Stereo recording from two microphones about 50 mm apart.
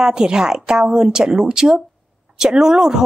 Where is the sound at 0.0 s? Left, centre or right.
Centre.